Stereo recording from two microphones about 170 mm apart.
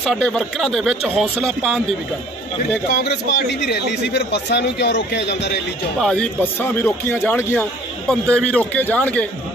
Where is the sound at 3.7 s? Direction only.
75° left (ahead or behind).